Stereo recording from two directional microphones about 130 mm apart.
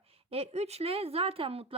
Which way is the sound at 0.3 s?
50° right (ahead or behind).